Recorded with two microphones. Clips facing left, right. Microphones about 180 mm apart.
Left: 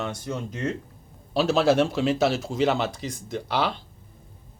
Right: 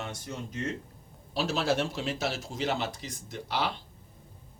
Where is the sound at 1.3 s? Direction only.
70° left (ahead or behind).